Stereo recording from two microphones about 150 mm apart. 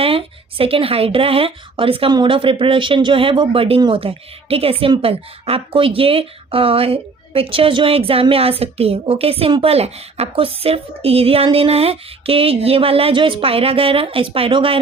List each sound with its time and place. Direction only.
0.0 s a woman's voice: 40° right (ahead or behind)